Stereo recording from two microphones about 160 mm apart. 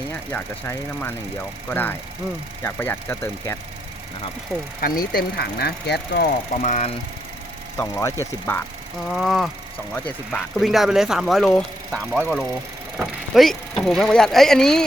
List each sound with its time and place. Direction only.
0.3 s speech: 15° left (ahead or behind)
4.8 s speech: 65° left (ahead or behind); by 6.2 s 90° left
6.6 s speech: 45° left (ahead or behind)
7.8 s speech: 15° left (ahead or behind)
9.0 s speech: centre (ahead or behind)